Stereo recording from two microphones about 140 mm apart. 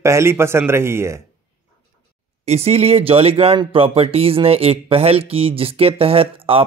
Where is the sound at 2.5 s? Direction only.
45° right (ahead or behind).